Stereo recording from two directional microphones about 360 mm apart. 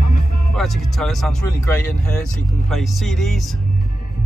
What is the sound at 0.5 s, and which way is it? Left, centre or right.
Speech, centre.